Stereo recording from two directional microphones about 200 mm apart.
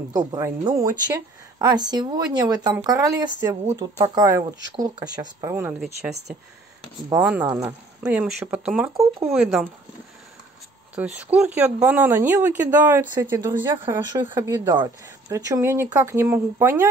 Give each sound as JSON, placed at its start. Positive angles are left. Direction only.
{"t": 0.3, "sound": "a woman's voice", "side_deg": -15}
{"t": 7.1, "sound": "a woman's voice", "side_deg": -5}
{"t": 9.3, "sound": "speech", "side_deg": 0}
{"t": 11.1, "sound": "a woman's voice", "side_deg": -5}